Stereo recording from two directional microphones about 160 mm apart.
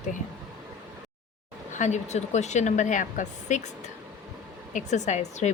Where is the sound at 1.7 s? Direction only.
45° left (ahead or behind).